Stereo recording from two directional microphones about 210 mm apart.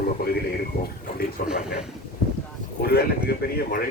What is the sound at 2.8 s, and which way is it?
Speech, 50° left (ahead or behind).